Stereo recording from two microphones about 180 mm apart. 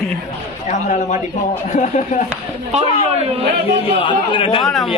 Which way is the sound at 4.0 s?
30° left (ahead or behind).